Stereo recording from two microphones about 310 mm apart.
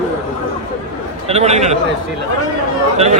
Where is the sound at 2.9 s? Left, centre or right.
Right.